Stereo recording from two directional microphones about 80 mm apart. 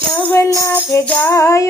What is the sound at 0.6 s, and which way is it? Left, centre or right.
Music, left.